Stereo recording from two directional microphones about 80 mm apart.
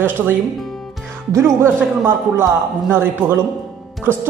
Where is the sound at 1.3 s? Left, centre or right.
Right.